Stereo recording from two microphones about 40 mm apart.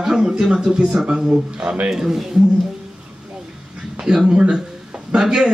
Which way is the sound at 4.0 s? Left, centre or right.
Centre.